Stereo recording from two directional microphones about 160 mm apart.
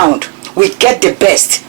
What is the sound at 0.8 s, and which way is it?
Speech, 15° right (ahead or behind).